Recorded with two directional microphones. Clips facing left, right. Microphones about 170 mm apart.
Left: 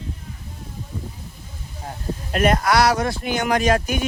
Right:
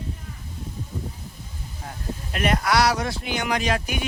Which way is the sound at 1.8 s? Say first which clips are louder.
Left 4 dB; 30° left (ahead or behind).